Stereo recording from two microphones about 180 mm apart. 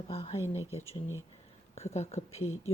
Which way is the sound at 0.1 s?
35° left (ahead or behind).